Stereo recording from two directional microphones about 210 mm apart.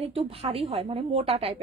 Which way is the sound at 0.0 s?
30° right (ahead or behind).